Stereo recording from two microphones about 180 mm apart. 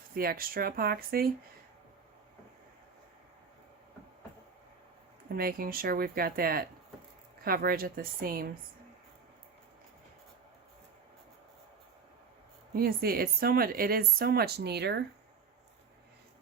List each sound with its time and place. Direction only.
0.1 s speech: 55° right (ahead or behind)
5.4 s speech: 55° right (ahead or behind)
12.7 s speech: 55° right (ahead or behind)